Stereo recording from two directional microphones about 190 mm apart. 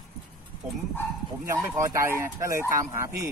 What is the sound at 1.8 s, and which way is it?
Speech, 15° right (ahead or behind).